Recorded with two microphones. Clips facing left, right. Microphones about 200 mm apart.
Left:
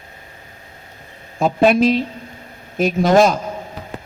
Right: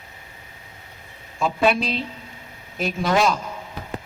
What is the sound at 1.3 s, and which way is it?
A man's voice, 45° left (ahead or behind).